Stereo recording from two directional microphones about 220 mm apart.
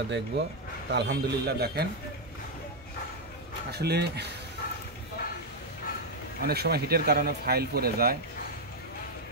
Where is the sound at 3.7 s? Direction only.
50° right (ahead or behind).